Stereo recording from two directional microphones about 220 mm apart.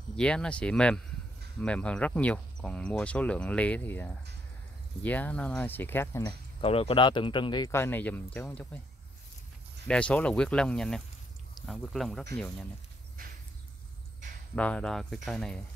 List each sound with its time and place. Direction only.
0.1 s speech: 5° left (ahead or behind)
6.6 s speech: 25° left (ahead or behind); by 8.8 s 5° left (ahead or behind)
9.8 s speech: 5° left (ahead or behind)
13.2 s a sound: 40° right (ahead or behind)
14.5 s speech: 5° left (ahead or behind)